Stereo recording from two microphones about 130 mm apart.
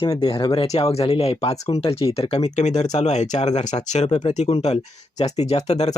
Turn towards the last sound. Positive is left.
turn(degrees=60)  # may be behind; listen again after turning